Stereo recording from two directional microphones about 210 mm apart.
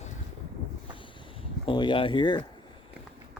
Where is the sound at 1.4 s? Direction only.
25° left (ahead or behind).